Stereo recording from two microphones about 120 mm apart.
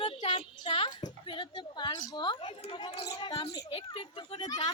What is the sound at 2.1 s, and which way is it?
A woman's voice, 35° left (ahead or behind).